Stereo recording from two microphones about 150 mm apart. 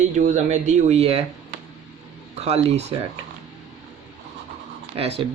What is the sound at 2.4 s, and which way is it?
Speech, 45° right (ahead or behind).